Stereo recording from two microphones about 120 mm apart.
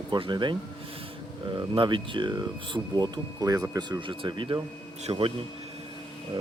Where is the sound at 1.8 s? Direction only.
45° right (ahead or behind).